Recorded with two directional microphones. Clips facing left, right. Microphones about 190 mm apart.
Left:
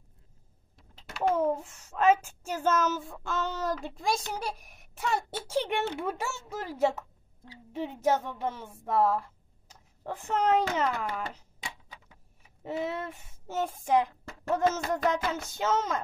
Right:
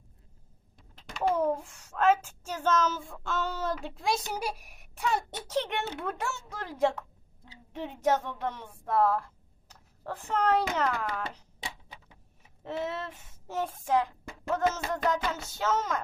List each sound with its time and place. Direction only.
0.7 s a child's voice: 5° left (ahead or behind)
12.6 s speech: 10° left (ahead or behind)
14.9 s music: 5° left (ahead or behind)
15.5 s speech: 15° left (ahead or behind)